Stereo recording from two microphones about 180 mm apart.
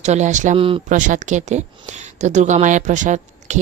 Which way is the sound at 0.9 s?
45° right (ahead or behind).